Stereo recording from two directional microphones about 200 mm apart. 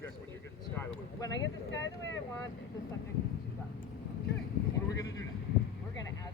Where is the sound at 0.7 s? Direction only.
15° left (ahead or behind).